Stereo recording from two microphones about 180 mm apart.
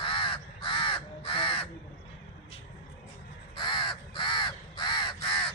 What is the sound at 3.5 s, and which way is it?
Crow, 25° left (ahead or behind).